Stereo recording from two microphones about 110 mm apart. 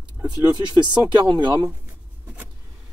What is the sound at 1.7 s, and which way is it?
Writing, 15° right (ahead or behind).